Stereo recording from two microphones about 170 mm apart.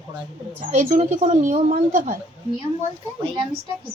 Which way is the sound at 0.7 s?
45° right (ahead or behind).